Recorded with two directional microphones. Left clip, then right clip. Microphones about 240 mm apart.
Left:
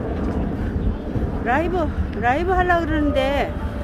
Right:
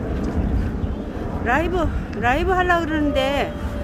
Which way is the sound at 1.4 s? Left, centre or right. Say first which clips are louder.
Even; centre.